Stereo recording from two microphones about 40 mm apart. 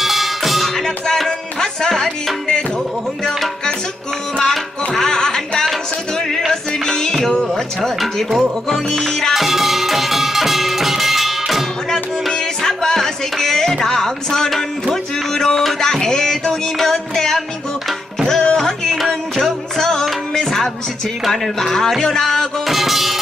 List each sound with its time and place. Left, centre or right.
0.0 s music: centre
4.4 s music: centre
8.0 s speech: centre
8.6 s music: centre
9.3 s music: centre
11.9 s music: centre
22.7 s music: centre